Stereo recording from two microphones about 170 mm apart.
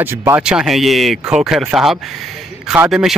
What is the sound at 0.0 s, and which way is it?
A man's voice, 15° right (ahead or behind).